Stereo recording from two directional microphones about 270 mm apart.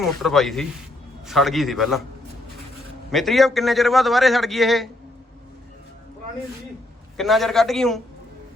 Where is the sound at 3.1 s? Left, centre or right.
Centre.